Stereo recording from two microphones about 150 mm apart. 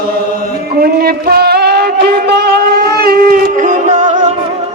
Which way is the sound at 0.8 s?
90° right.